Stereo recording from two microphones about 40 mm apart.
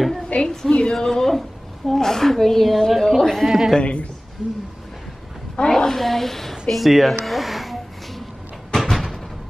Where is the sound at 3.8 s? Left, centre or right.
Left.